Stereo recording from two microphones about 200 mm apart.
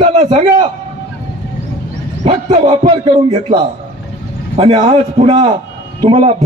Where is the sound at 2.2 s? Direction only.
30° right (ahead or behind).